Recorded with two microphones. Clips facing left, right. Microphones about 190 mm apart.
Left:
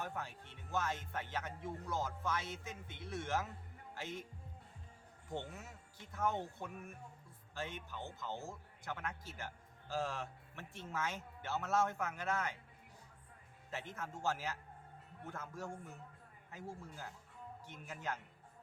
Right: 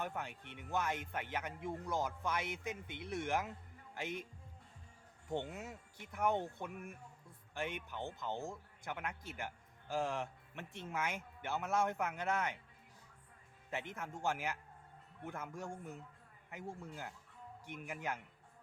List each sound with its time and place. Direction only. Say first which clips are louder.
0.0 s speech: right 2 dB; 20° right (ahead or behind)
5.4 s speech: right 4 dB; 20° right (ahead or behind)
13.7 s speech: right 2 dB; 15° right (ahead or behind)